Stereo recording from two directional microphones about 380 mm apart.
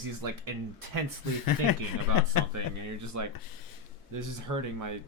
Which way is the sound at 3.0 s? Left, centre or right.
Right.